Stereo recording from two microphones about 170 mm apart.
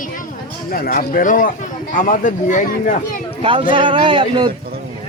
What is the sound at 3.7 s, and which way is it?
Speech, 30° right (ahead or behind).